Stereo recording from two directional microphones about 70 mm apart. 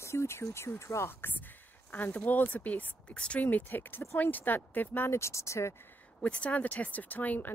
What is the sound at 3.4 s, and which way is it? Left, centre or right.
Speech, left.